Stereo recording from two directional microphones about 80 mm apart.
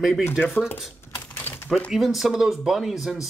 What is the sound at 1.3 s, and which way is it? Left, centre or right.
Typewriter, left.